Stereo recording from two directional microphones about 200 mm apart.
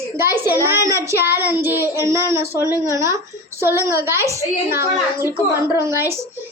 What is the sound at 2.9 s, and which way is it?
A child's voice, 15° right (ahead or behind).